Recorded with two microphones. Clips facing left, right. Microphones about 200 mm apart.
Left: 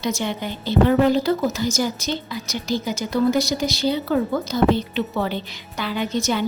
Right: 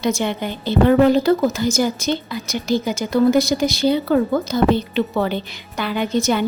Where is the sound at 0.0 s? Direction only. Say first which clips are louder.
Right 4 dB; 55° right (ahead or behind).